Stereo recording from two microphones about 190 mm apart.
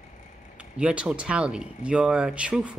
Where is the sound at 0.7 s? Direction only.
5° right (ahead or behind).